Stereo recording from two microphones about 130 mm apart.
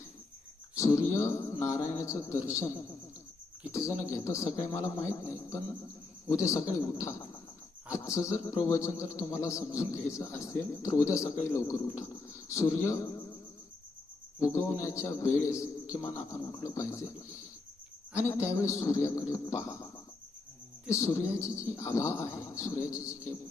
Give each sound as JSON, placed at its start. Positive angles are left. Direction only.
{"t": 0.8, "sound": "speech", "side_deg": 25}
{"t": 14.4, "sound": "speech", "side_deg": 20}
{"t": 20.9, "sound": "speech", "side_deg": 25}